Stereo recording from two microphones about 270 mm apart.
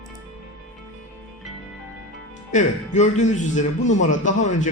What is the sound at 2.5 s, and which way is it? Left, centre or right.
A man's voice, left.